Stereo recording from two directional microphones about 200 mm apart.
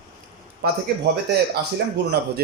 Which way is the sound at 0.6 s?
50° right (ahead or behind).